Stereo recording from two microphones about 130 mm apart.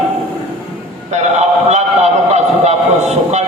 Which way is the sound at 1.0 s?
60° right (ahead or behind).